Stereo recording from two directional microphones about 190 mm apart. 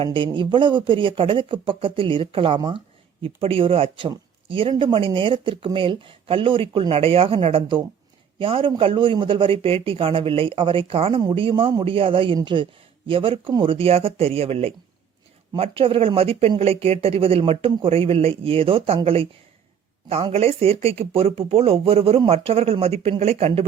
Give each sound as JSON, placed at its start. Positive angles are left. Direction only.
{"t": 0.0, "sound": "speech", "side_deg": -25}